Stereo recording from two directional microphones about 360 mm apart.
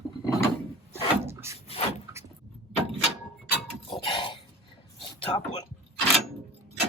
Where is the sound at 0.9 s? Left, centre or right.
Centre.